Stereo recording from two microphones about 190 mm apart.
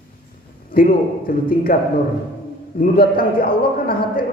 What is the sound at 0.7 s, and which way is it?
A man's voice, 50° left (ahead or behind).